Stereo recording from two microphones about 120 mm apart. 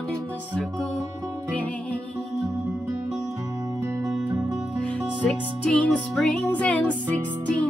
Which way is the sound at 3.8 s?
25° right (ahead or behind).